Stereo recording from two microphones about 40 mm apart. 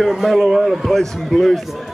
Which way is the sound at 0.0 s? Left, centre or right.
Centre.